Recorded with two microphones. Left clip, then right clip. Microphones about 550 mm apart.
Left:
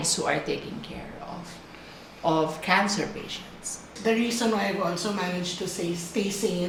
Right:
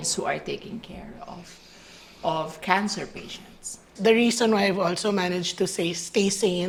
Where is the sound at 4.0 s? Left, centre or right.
Right.